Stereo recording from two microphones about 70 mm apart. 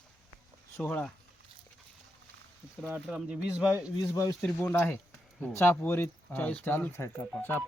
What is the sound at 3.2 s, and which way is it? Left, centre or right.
Speech, centre.